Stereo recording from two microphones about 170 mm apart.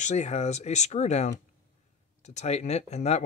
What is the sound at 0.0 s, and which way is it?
Speech, 40° left (ahead or behind).